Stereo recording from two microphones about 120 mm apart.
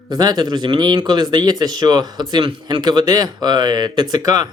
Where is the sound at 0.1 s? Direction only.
35° right (ahead or behind).